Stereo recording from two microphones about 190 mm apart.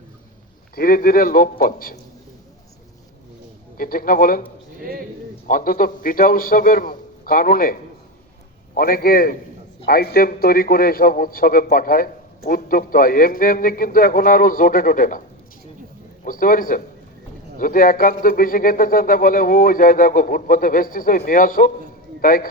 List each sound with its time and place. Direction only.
0.8 s a man's voice: 50° left (ahead or behind)
3.8 s a man's voice: 50° left (ahead or behind)
4.8 s a man's voice: 50° right (ahead or behind)
5.5 s a man's voice: 50° left (ahead or behind)
16.2 s a man's voice: 45° left (ahead or behind)